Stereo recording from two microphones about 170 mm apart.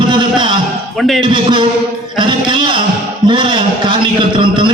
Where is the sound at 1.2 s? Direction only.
30° right (ahead or behind).